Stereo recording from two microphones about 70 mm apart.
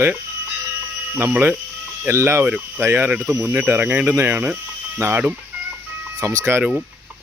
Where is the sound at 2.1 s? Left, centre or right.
Right.